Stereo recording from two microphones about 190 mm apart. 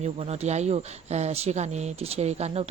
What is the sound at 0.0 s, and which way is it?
Speech, 35° right (ahead or behind).